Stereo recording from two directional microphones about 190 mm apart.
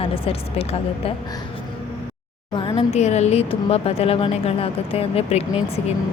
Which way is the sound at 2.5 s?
25° left (ahead or behind).